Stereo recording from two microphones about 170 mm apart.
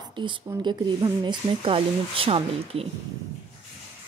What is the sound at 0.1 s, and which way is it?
A woman's voice, 30° right (ahead or behind).